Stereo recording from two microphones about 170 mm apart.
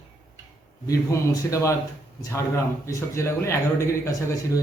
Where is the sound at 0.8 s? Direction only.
20° left (ahead or behind).